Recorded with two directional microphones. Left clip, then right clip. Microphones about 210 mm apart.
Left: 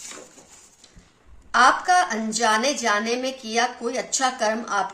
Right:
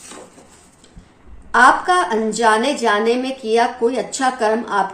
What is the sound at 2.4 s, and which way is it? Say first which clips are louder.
A woman's voice: right 5 dB; 50° left (ahead or behind).